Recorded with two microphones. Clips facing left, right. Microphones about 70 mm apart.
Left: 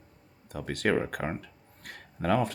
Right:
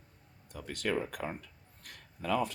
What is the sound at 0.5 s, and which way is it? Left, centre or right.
Speech, left.